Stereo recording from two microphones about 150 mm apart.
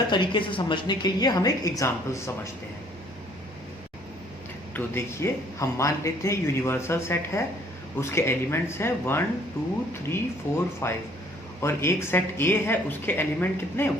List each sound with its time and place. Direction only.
0.1 s speech: 35° left (ahead or behind)
4.7 s speech: 15° left (ahead or behind)
10.5 s speech: 20° left (ahead or behind)